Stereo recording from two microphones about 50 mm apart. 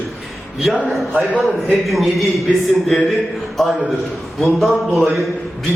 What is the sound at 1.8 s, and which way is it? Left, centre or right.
Speech, centre.